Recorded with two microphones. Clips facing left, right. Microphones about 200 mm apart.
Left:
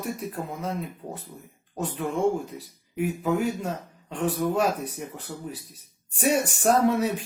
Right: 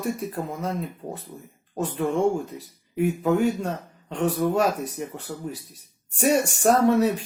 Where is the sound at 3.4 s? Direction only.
75° right (ahead or behind).